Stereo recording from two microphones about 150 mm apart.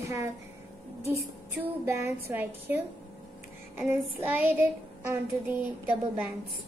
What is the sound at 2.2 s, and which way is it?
Speech, 15° right (ahead or behind).